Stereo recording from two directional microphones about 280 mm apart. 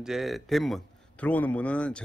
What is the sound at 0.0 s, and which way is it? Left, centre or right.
Speech, centre.